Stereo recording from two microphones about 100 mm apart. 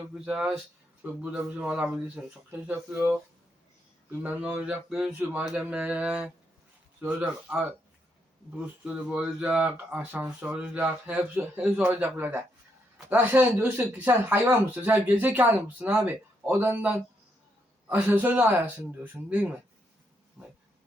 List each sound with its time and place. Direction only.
0.1 s speech: 10° right (ahead or behind)
1.0 s a man's voice: 15° right (ahead or behind)
4.2 s speech: 15° right (ahead or behind)
4.9 s speech: 5° right (ahead or behind)
5.1 s a man's voice: 15° right (ahead or behind)
20.4 s a sound: 5° right (ahead or behind)